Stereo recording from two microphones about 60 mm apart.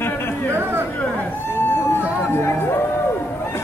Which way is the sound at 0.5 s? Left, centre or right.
Right.